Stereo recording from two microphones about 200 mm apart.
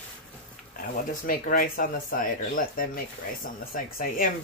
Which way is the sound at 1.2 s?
45° left (ahead or behind).